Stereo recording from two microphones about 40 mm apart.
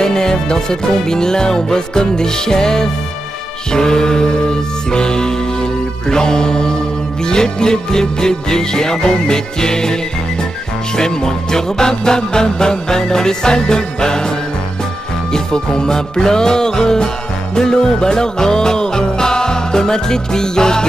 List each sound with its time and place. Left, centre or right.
0.0 s music: centre
11.0 s music: centre
15.3 s music: centre